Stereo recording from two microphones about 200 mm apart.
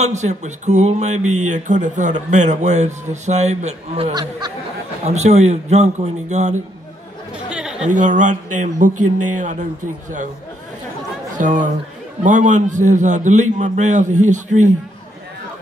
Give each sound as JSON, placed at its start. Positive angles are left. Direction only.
{"t": 0.0, "sound": "speech", "side_deg": -35}
{"t": 1.2, "sound": "speech", "side_deg": -90}
{"t": 1.5, "sound": "speech", "side_deg": -35}
{"t": 5.0, "sound": "speech", "side_deg": -35}
{"t": 7.3, "sound": "chatter", "side_deg": -5}
{"t": 7.8, "sound": "speech", "side_deg": -40}
{"t": 11.3, "sound": "speech", "side_deg": -40}